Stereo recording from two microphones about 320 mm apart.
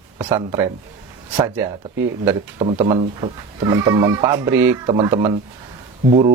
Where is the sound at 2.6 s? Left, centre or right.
Centre.